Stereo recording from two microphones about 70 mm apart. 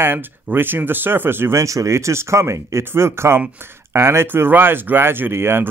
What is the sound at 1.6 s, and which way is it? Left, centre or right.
Speech, right.